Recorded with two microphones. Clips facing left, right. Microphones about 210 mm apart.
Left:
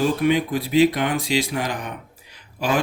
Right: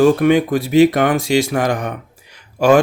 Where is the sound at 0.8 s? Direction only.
50° right (ahead or behind).